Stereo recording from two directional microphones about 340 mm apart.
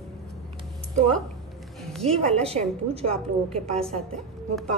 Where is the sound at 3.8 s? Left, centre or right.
Centre.